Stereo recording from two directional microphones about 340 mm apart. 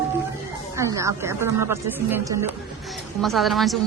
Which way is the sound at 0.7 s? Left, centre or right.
Centre.